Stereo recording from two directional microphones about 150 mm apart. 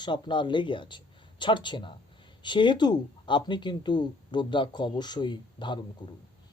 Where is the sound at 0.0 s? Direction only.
30° left (ahead or behind).